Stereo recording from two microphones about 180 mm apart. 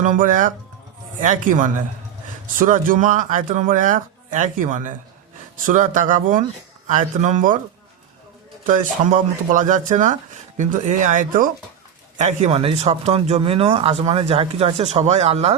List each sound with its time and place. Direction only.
0.0 s speech: 45° right (ahead or behind)
8.6 s speech: 45° right (ahead or behind)